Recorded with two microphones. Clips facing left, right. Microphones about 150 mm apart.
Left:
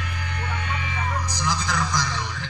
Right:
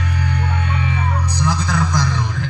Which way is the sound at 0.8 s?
60° right (ahead or behind).